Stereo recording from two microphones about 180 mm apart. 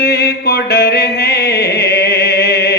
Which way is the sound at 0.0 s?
60° left (ahead or behind).